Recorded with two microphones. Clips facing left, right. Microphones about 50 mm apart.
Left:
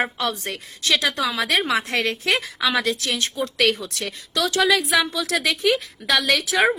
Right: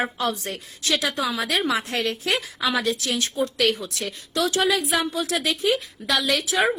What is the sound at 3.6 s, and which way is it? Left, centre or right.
A woman's voice, left.